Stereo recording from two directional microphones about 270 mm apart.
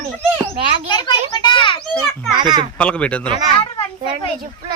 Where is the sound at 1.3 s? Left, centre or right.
Centre.